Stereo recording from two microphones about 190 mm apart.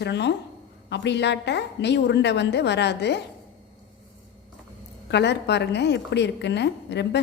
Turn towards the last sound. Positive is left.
turn(degrees=65)  # may be behind; listen again after turning